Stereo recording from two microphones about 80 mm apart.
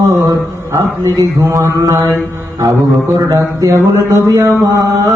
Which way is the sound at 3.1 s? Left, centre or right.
Right.